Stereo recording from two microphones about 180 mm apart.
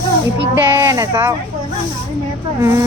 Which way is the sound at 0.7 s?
20° right (ahead or behind).